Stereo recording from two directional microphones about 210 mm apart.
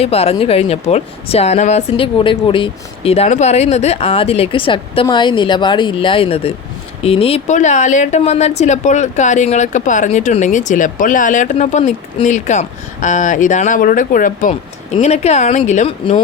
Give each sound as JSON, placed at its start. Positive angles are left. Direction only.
{"t": 0.0, "sound": "speech", "side_deg": 30}